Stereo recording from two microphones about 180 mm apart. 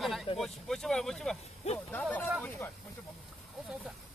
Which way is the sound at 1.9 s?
10° left (ahead or behind).